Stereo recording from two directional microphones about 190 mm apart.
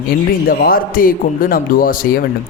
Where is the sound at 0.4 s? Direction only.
50° left (ahead or behind).